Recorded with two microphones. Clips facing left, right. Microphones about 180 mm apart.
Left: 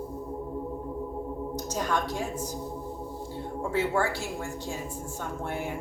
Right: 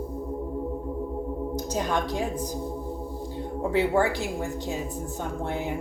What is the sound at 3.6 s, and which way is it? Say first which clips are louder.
A woman's voice: right 4 dB; 15° right (ahead or behind).